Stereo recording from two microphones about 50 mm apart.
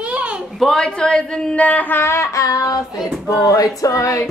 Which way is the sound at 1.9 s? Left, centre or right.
Left.